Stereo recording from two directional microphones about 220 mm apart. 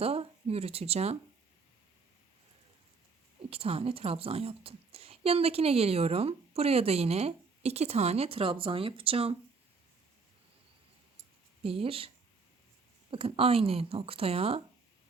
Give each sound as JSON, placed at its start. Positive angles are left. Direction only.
{"t": 0.0, "sound": "speech", "side_deg": -25}
{"t": 3.5, "sound": "speech", "side_deg": -25}
{"t": 11.6, "sound": "speech", "side_deg": -25}